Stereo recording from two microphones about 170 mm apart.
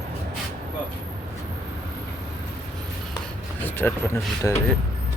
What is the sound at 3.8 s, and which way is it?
Speech, 15° left (ahead or behind).